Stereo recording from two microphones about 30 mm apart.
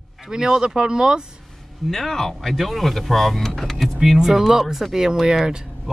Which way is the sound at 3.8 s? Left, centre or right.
Centre.